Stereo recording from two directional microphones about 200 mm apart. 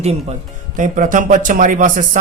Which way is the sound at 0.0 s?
30° right (ahead or behind).